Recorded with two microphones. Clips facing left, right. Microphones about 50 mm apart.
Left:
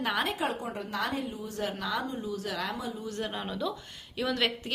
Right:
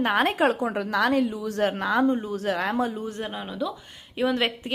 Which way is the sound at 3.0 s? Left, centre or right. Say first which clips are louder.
Right 3 dB; right.